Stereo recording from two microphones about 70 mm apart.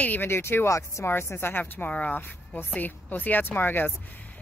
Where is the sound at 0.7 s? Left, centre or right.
Left.